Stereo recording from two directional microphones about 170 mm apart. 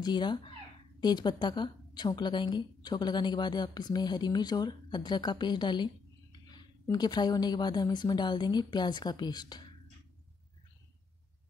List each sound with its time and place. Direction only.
0.0 s a woman's voice: 25° left (ahead or behind)